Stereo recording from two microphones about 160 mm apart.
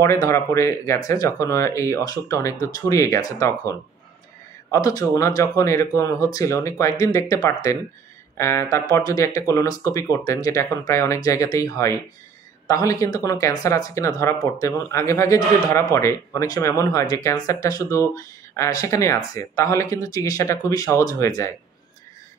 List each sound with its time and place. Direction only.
0.0 s speech: 20° left (ahead or behind)